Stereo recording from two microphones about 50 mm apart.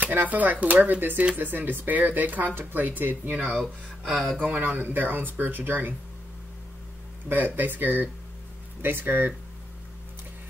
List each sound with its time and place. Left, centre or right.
0.0 s speech: right
7.2 s speech: right